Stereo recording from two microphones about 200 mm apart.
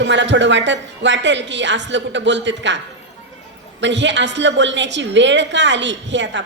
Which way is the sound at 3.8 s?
65° right (ahead or behind).